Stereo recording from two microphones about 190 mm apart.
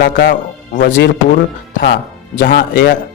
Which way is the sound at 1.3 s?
45° left (ahead or behind).